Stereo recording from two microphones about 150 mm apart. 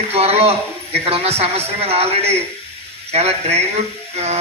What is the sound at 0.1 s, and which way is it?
Speech, 40° right (ahead or behind).